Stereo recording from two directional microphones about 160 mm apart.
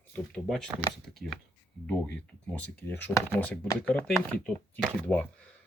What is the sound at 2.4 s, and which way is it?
Speech, 10° left (ahead or behind).